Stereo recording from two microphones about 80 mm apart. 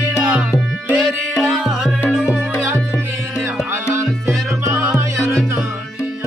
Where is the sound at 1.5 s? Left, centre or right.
Centre.